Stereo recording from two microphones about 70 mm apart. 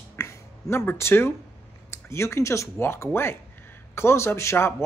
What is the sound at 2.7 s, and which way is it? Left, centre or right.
Speech, left.